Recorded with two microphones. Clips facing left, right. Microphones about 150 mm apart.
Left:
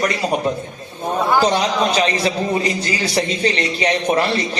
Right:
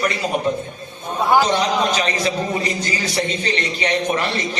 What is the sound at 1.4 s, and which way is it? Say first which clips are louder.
A man's voice: left 1 dB; 35° left (ahead or behind).